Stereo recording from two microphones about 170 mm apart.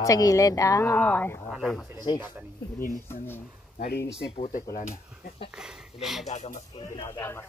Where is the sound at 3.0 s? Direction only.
15° left (ahead or behind).